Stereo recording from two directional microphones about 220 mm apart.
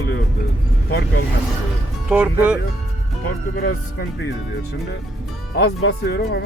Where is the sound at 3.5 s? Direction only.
50° left (ahead or behind).